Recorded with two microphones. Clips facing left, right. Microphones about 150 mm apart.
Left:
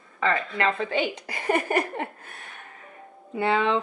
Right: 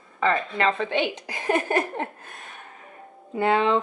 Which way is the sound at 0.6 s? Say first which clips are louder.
Right 2 dB; 5° left (ahead or behind).